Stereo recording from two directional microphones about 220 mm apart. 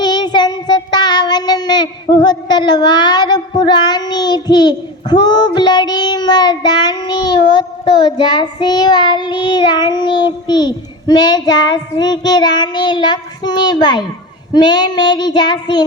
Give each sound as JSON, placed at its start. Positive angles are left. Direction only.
{"t": 0.0, "sound": "child singing", "side_deg": 20}